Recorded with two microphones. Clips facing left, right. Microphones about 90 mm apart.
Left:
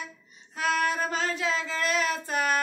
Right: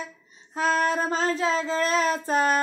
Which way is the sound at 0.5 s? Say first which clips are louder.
Right 3 dB; 35° right (ahead or behind).